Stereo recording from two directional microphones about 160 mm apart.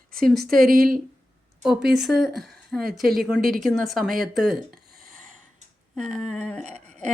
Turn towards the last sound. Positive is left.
turn(degrees=5)  # may be behind; listen again after turning